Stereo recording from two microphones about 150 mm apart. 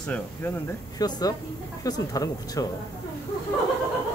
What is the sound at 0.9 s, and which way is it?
Speech, 25° left (ahead or behind).